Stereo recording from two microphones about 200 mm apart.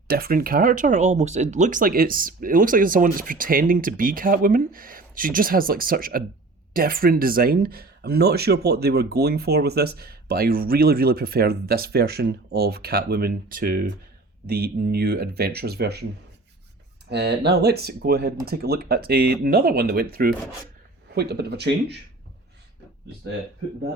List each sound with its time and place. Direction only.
0.1 s speech: 50° right (ahead or behind)
17.1 s speech: 55° right (ahead or behind)